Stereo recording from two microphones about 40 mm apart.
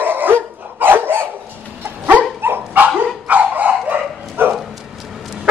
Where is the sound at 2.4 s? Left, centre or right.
Right.